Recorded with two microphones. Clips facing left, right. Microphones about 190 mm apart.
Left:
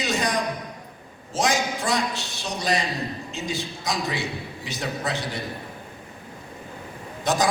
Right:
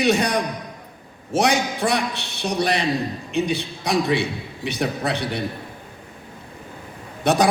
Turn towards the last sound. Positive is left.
turn(degrees=-65)  # may be behind; listen again after turning